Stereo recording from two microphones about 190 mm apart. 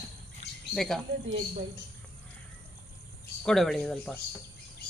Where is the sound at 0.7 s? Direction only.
Centre (ahead or behind).